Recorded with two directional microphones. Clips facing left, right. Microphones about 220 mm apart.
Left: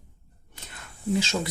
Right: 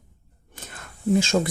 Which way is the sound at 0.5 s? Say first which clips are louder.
Right 4 dB; 50° right (ahead or behind).